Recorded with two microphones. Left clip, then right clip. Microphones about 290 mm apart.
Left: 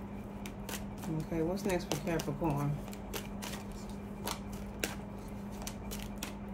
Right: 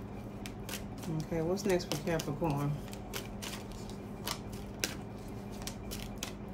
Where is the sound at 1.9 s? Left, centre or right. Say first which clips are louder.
Right 1 dB; centre.